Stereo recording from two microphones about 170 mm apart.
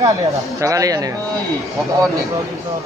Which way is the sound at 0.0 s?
20° right (ahead or behind).